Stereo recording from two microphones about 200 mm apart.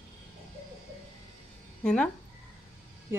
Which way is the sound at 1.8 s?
5° left (ahead or behind).